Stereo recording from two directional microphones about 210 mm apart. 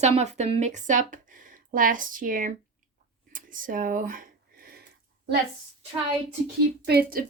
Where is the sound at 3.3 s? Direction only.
40° right (ahead or behind).